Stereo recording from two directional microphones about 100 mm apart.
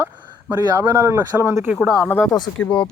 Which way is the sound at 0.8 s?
30° right (ahead or behind).